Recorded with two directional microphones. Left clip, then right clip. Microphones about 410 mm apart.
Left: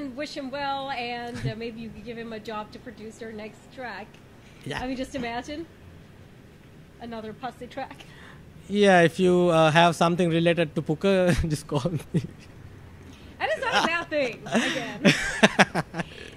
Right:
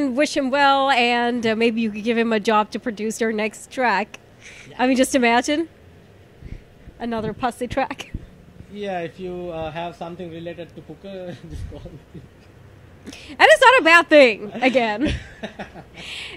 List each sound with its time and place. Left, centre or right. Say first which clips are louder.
0.0 s speech: right 13 dB; right
7.0 s speech: right 11 dB; right
8.7 s speech: left 9 dB; left
13.1 s a woman's voice: right 15 dB; right
14.5 s a woman's voice: right 5 dB; centre